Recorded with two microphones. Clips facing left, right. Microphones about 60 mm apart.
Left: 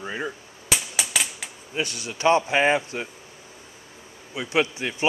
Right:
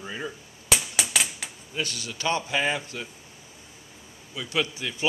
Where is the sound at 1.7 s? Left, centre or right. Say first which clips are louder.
Left 3 dB; left.